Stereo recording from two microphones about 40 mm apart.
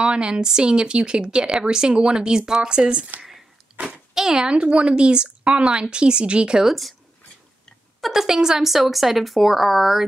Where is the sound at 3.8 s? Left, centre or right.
Right.